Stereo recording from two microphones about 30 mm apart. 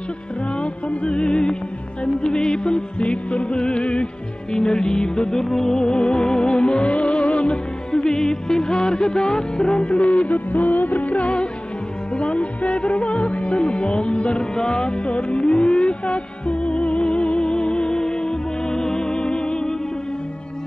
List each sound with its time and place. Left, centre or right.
1.0 s music: left
5.4 s music: centre; by 7.5 s left
7.9 s music: left
9.9 s music: left